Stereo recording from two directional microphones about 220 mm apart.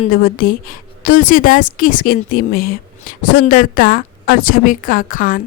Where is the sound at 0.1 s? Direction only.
40° left (ahead or behind).